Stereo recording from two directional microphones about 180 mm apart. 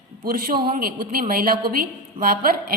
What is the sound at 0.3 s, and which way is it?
A woman's voice, 55° right (ahead or behind).